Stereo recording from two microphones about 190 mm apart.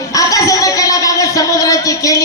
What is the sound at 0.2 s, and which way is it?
Music, 15° left (ahead or behind).